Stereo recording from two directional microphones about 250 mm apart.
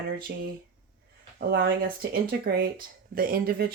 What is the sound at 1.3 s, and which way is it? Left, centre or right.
Speech, right.